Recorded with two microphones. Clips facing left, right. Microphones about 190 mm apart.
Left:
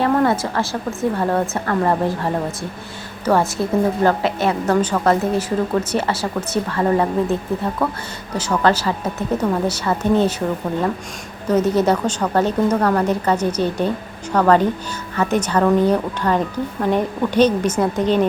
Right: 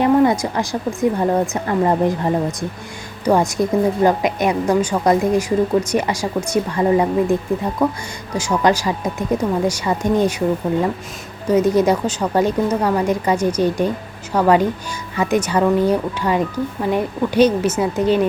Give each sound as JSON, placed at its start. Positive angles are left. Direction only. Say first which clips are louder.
{"t": 0.0, "sound": "a woman's voice", "louder": "right 3 dB", "side_deg": -15}
{"t": 11.4, "sound": "a woman's voice", "louder": "right 2 dB", "side_deg": -10}